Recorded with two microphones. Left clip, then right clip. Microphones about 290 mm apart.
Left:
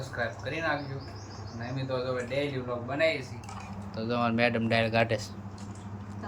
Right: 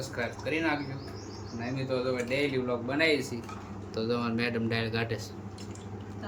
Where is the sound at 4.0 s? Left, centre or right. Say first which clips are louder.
Left 3 dB; centre.